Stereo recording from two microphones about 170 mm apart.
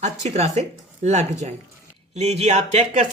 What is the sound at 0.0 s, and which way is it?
Speech, 40° right (ahead or behind).